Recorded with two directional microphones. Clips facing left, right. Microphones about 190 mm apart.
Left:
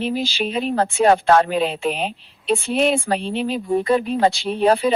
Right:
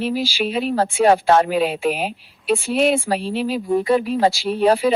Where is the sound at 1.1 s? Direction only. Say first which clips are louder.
Even; 20° right (ahead or behind).